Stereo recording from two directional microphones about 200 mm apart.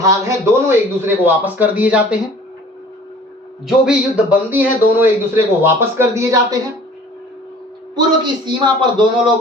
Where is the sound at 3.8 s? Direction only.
10° right (ahead or behind).